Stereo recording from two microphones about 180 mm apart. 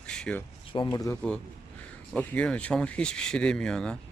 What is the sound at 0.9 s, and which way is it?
Speech, 20° left (ahead or behind).